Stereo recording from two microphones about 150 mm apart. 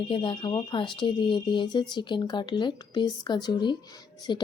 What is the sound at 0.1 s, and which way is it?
Speech, 35° left (ahead or behind).